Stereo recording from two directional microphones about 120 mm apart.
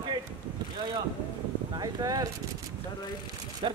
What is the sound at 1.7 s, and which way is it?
Speech, 35° right (ahead or behind).